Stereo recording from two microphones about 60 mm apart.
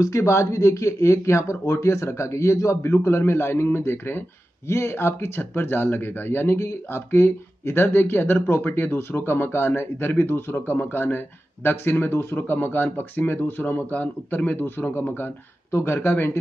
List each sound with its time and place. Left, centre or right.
0.0 s a man's voice: left
12.4 s a man's voice: left